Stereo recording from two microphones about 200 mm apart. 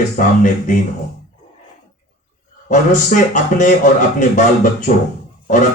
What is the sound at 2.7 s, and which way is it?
Speech, 40° left (ahead or behind).